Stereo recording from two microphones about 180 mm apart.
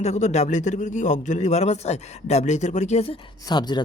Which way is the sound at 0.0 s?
40° left (ahead or behind).